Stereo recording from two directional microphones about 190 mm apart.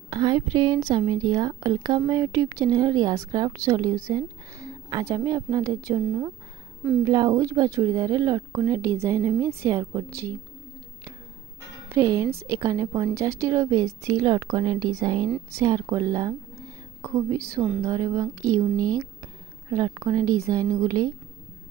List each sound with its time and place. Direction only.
0.1 s a woman's voice: 25° right (ahead or behind)
11.9 s speech: 15° right (ahead or behind)